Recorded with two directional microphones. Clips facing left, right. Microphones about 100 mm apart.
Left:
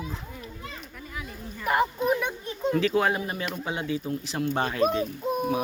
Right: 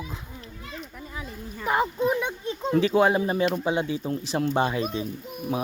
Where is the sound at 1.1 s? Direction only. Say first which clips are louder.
Left 2 dB; 25° right (ahead or behind).